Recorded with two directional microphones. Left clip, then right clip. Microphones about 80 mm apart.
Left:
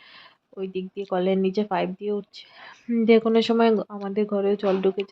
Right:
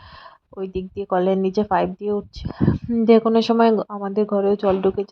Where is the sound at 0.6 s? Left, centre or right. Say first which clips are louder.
Right 3 dB; right.